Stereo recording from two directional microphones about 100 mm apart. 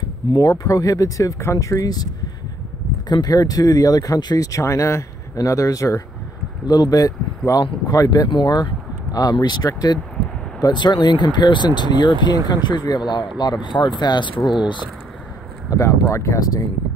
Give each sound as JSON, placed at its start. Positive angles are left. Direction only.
{"t": 0.3, "sound": "speech", "side_deg": 40}
{"t": 3.1, "sound": "speech", "side_deg": 40}
{"t": 8.3, "sound": "speech", "side_deg": 50}
{"t": 15.7, "sound": "speech", "side_deg": 30}